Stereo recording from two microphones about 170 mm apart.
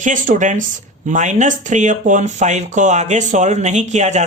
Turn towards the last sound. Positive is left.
turn(degrees=-45)  # may be behind; listen again after turning